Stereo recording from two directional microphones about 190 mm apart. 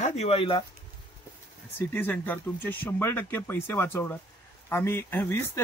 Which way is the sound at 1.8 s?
10° left (ahead or behind).